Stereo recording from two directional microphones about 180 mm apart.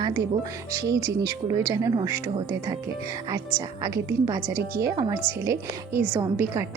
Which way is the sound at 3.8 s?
20° right (ahead or behind).